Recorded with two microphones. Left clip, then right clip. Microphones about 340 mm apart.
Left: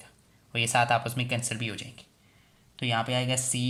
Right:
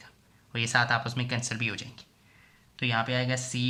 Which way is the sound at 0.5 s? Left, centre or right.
Centre.